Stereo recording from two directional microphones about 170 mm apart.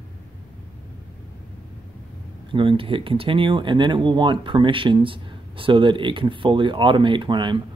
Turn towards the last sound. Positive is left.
turn(degrees=-30)  # may be behind; listen again after turning